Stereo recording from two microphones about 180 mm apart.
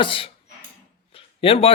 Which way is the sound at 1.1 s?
30° left (ahead or behind).